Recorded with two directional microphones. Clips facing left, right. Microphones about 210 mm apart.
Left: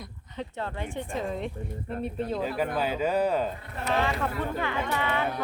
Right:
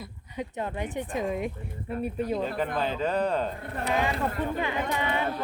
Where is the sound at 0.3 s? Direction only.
15° right (ahead or behind).